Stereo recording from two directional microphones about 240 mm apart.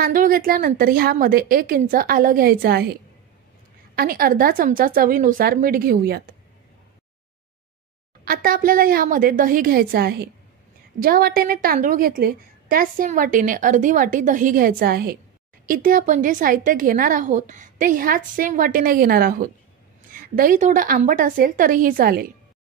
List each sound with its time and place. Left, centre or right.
0.0 s a woman's voice: right
8.3 s a woman's voice: right